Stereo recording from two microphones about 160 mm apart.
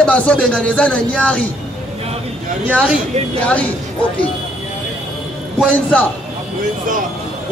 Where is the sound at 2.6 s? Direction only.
10° right (ahead or behind).